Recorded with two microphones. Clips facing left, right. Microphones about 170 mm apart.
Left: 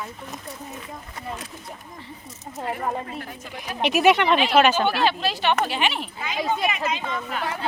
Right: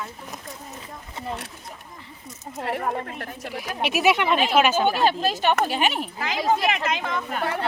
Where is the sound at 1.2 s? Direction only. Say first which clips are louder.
Right 3 dB; 25° right (ahead or behind).